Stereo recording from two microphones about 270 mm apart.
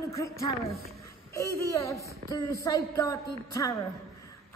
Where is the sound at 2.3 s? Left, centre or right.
Centre.